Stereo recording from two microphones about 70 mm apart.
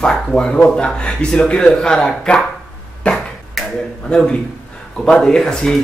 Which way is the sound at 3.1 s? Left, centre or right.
Centre.